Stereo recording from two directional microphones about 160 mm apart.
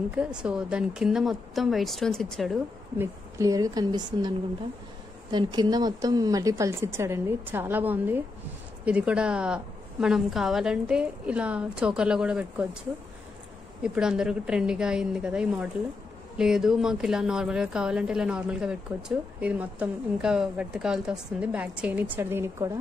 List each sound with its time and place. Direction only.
0.1 s speech: 5° right (ahead or behind)
3.0 s a woman's voice: 20° right (ahead or behind)
13.8 s speech: 5° right (ahead or behind)